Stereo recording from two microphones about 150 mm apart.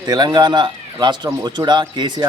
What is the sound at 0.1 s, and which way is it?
A man's voice, 30° right (ahead or behind).